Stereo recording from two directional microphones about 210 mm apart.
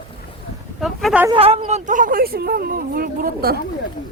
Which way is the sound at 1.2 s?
25° right (ahead or behind).